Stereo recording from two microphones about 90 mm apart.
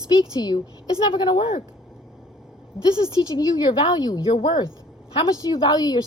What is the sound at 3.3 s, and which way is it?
A woman's voice, 50° left (ahead or behind).